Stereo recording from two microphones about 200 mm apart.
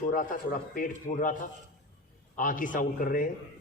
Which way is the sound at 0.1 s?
40° left (ahead or behind).